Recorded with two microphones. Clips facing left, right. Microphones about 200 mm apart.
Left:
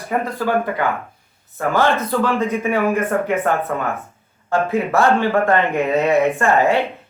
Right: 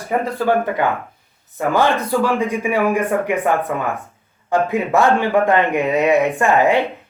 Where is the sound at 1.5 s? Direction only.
15° right (ahead or behind).